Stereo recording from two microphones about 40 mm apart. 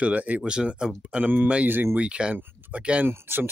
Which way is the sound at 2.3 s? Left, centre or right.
Right.